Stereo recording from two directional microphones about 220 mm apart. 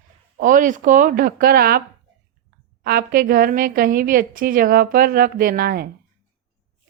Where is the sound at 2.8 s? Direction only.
45° right (ahead or behind).